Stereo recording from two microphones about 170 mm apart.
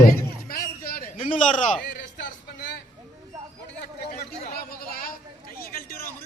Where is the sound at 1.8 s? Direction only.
75° left (ahead or behind).